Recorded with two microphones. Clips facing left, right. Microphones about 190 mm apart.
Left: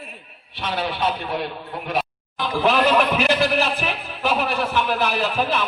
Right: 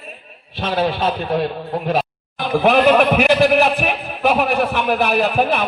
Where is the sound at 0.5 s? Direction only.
55° right (ahead or behind).